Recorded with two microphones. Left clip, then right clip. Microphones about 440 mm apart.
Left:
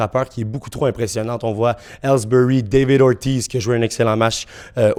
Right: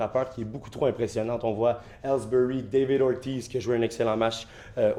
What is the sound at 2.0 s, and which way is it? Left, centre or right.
Speech, left.